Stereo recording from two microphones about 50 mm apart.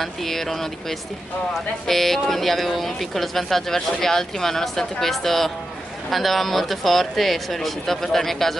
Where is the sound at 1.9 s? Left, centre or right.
Centre.